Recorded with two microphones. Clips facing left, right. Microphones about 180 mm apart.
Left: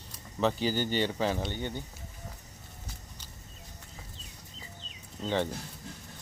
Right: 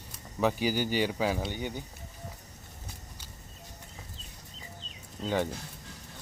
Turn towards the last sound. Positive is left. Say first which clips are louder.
# even
turn(degrees=-10)  # may be behind; listen again after turning